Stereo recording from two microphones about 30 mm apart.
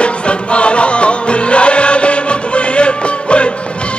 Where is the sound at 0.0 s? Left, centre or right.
Left.